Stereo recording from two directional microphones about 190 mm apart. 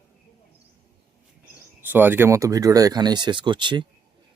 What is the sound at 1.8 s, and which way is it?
Speech, 10° right (ahead or behind).